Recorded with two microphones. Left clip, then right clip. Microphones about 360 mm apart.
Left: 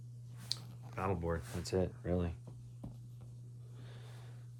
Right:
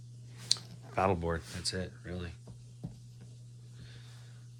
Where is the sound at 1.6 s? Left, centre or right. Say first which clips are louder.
Left 1 dB; centre.